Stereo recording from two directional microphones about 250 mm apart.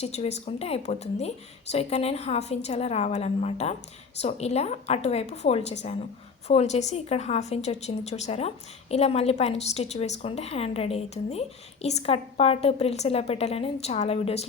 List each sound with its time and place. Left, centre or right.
0.0 s a woman's voice: left